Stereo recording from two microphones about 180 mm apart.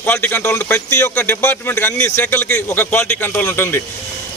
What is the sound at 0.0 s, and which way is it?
A man's voice, 10° left (ahead or behind).